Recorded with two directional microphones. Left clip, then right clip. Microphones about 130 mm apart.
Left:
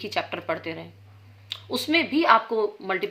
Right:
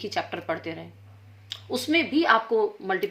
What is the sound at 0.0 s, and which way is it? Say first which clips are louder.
Speech: left 1 dB; 20° left (ahead or behind).